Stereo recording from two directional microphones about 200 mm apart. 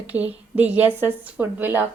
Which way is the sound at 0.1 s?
10° right (ahead or behind).